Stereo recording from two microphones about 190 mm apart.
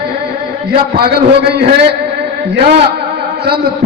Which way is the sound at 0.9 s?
55° right (ahead or behind).